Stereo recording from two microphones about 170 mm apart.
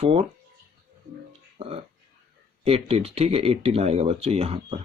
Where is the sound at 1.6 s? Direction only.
35° right (ahead or behind).